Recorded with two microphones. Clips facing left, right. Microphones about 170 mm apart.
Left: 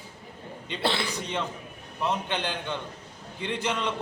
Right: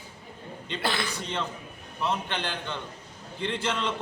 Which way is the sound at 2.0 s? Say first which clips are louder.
Left 1 dB; 15° left (ahead or behind).